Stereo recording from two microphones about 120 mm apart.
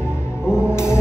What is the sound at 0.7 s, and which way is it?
Music, 20° left (ahead or behind).